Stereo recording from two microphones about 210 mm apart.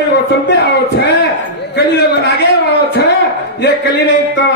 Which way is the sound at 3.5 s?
50° left (ahead or behind).